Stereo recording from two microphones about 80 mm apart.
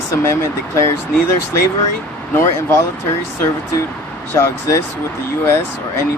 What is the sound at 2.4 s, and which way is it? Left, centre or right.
Speech, left.